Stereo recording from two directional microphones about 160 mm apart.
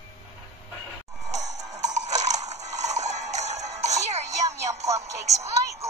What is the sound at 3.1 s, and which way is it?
Music, 45° right (ahead or behind).